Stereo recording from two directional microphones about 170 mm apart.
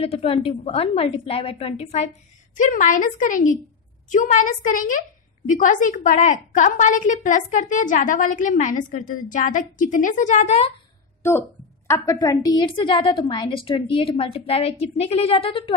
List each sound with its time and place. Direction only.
0.0 s a woman's voice: 35° left (ahead or behind)
11.9 s a woman's voice: 20° left (ahead or behind)